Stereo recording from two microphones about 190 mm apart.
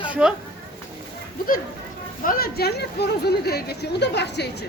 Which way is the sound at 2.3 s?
55° left (ahead or behind).